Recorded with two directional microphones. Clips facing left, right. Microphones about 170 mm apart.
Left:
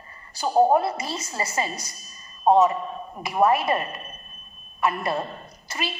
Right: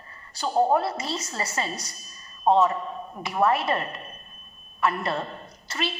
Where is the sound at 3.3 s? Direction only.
10° left (ahead or behind).